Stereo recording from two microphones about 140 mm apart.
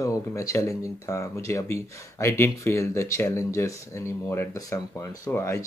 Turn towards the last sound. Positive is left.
turn(degrees=20)  # may be behind; listen again after turning